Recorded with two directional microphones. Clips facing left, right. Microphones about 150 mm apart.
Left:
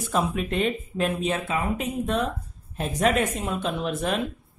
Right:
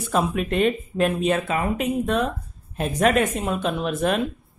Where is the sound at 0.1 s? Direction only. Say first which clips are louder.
Right 3 dB; 60° right (ahead or behind).